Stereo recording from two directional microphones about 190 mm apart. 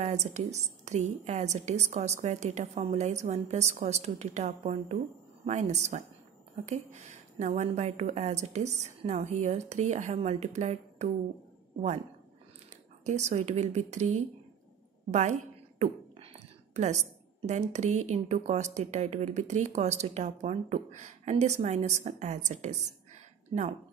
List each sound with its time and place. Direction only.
0.0 s a woman's voice: 35° right (ahead or behind)
13.0 s a woman's voice: 35° right (ahead or behind)
15.0 s a sound: 40° right (ahead or behind)
17.5 s a woman's voice: 40° right (ahead or behind)